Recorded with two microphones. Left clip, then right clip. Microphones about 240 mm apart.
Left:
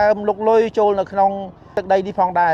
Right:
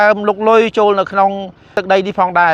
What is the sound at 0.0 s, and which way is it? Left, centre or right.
A man's voice, right.